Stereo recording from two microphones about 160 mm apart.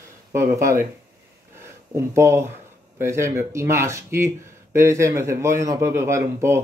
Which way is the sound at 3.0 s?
15° right (ahead or behind).